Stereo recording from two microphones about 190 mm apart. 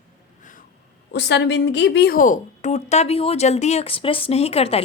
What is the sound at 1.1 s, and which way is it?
A woman's voice, 65° left (ahead or behind).